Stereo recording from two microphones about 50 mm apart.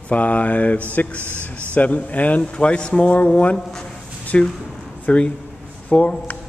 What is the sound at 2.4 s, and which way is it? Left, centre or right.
Speech, left.